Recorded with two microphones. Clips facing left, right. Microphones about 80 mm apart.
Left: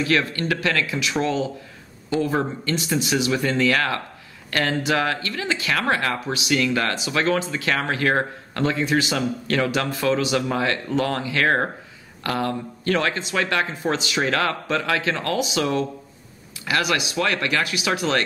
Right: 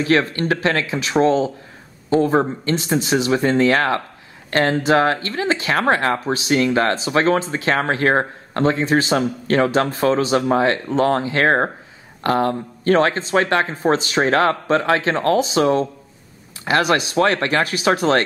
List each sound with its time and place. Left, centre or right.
0.0 s speech: right